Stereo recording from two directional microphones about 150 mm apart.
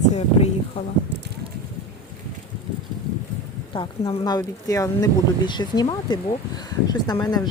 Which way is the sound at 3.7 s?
35° left (ahead or behind).